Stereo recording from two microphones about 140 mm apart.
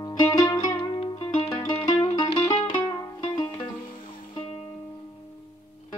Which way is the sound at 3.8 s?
85° left.